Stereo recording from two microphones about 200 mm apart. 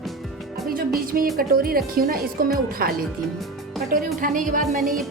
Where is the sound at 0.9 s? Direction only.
45° right (ahead or behind).